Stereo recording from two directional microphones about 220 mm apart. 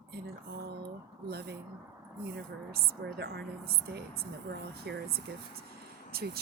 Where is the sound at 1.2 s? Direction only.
45° right (ahead or behind).